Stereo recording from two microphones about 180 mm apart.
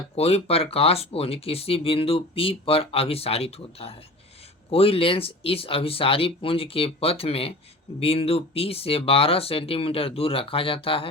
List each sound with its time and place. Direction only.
0.2 s speech: 35° left (ahead or behind)